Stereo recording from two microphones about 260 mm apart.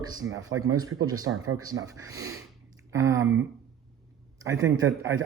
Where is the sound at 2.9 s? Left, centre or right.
Centre.